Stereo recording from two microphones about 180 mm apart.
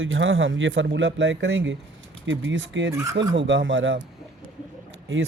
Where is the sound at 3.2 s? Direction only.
90° right.